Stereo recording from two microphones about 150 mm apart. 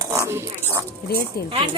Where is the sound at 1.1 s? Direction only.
90° left.